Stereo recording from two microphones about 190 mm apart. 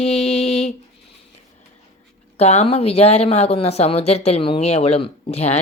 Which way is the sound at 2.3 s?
35° left (ahead or behind).